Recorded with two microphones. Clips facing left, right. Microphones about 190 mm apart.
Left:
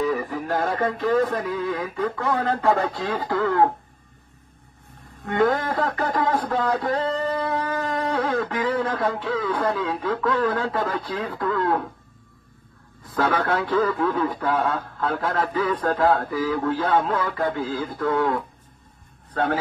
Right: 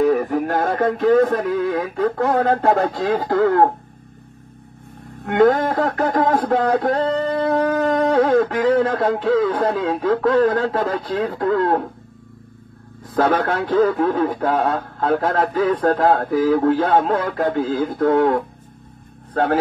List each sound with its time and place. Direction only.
0.0 s speech: 55° right (ahead or behind)
5.2 s speech: 60° right (ahead or behind)
8.6 s speech: 60° right (ahead or behind)
13.4 s speech: 55° right (ahead or behind)
16.0 s speech: 45° right (ahead or behind)